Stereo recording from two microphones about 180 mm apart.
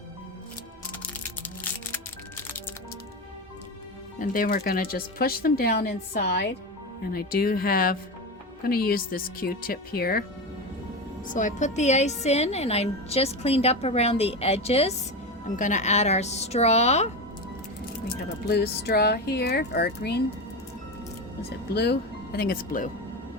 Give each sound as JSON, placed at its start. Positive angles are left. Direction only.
{"t": 4.2, "sound": "speech", "side_deg": 50}
{"t": 7.1, "sound": "speech", "side_deg": 60}
{"t": 11.3, "sound": "a woman's voice", "side_deg": 45}
{"t": 18.4, "sound": "speech", "side_deg": 65}
{"t": 21.7, "sound": "speech", "side_deg": 65}